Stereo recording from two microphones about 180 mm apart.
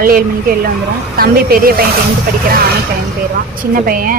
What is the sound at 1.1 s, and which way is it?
Speech, 55° right (ahead or behind).